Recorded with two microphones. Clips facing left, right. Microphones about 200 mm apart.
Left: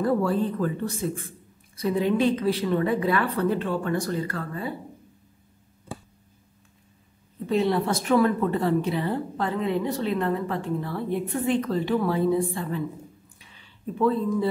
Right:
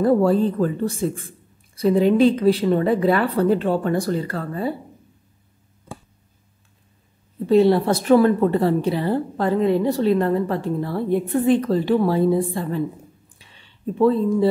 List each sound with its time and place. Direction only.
0.0 s a woman's voice: 30° right (ahead or behind)
7.4 s a woman's voice: 35° right (ahead or behind)
13.6 s speech: 30° right (ahead or behind)